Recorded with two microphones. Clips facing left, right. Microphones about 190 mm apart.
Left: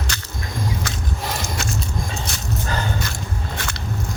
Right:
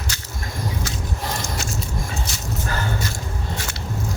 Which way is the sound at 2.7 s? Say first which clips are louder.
Left 1 dB; 20° left (ahead or behind).